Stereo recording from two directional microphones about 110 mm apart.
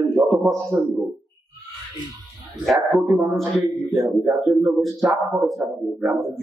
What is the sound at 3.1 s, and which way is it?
Speech, 30° right (ahead or behind).